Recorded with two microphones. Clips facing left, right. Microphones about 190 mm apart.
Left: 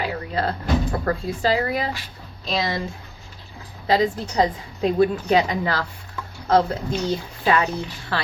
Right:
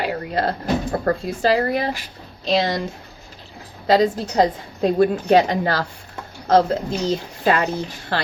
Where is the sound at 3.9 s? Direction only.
45° right (ahead or behind).